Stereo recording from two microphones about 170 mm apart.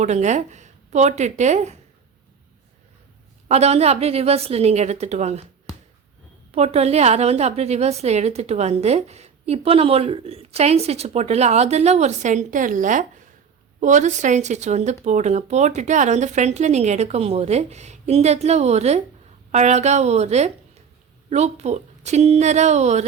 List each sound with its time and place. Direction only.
0.0 s speech: 45° right (ahead or behind)
3.5 s a woman's voice: 40° right (ahead or behind)
6.5 s a woman's voice: 40° right (ahead or behind)